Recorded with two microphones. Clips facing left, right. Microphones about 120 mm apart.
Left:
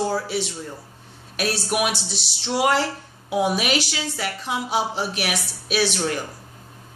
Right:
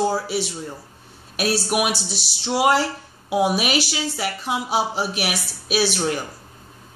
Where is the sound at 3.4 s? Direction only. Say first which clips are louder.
Right 1 dB; 15° right (ahead or behind).